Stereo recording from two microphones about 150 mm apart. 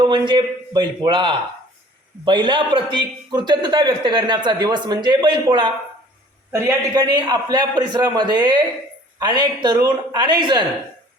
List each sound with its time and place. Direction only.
0.0 s a man's voice: 30° right (ahead or behind)